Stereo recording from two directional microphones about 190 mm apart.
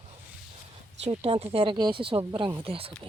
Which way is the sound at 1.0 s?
30° right (ahead or behind).